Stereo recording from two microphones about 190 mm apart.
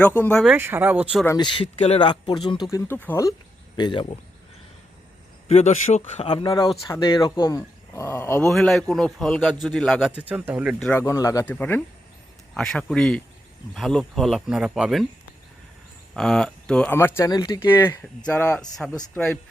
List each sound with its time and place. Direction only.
0.2 s speech: 5° left (ahead or behind)
0.5 s speech: 10° right (ahead or behind)
1.4 s speech: 25° left (ahead or behind)
3.8 s speech: 25° left (ahead or behind)
5.5 s a man's voice: 35° left (ahead or behind)
6.2 s speech: 25° left (ahead or behind); by 10.2 s 5° left (ahead or behind)
10.2 s speech: 10° right (ahead or behind)
16.1 s speech: 5° left (ahead or behind)